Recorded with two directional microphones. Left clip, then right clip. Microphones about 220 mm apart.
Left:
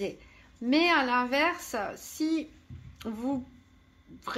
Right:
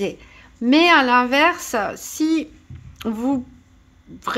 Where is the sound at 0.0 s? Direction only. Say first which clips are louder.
Right 9 dB; 35° right (ahead or behind).